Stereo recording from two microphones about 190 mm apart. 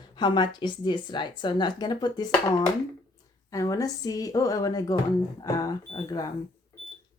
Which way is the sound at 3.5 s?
20° left (ahead or behind).